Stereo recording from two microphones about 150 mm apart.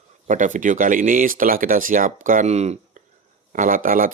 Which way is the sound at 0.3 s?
55° right (ahead or behind).